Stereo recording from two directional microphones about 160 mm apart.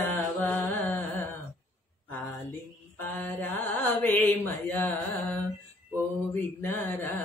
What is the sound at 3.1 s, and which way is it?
Mantra, 10° left (ahead or behind).